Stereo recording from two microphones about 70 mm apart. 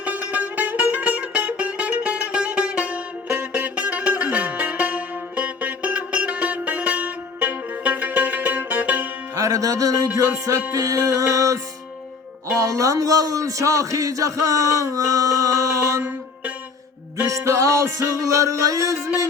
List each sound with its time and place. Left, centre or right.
0.0 s music: right
9.3 s music: right
11.0 s speech: right
17.2 s speech: right